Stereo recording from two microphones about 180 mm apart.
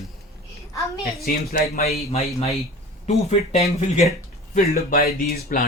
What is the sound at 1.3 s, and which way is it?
Speech, 50° left (ahead or behind).